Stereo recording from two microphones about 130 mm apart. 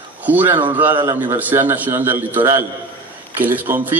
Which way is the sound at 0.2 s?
15° right (ahead or behind).